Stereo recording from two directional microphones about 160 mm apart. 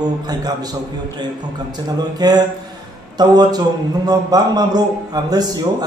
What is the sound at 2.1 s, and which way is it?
A man's voice, 25° right (ahead or behind).